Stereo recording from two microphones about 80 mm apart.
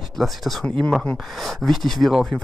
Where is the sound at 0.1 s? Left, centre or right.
Centre.